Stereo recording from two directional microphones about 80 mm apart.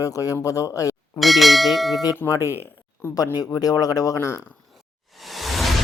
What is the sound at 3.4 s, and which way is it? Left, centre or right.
Speech, left.